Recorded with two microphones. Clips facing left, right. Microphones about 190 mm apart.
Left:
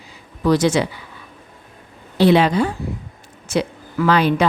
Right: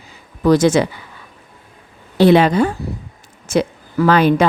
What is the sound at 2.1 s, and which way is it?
A woman's voice, 50° right (ahead or behind).